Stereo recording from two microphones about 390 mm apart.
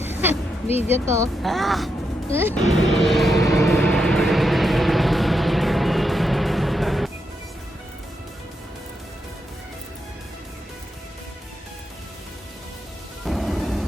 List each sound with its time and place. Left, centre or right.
0.0 s a sound: centre
0.7 s speech: centre
1.0 s speech: centre
2.3 s music: centre
13.2 s music: centre